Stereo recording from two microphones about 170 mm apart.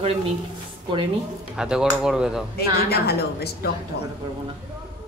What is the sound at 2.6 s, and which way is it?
A woman's voice, 70° left (ahead or behind).